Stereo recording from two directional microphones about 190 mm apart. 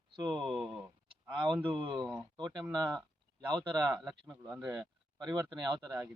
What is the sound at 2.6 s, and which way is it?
Speech, 20° right (ahead or behind).